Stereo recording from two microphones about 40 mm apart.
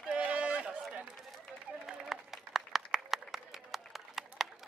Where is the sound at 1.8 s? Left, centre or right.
Centre.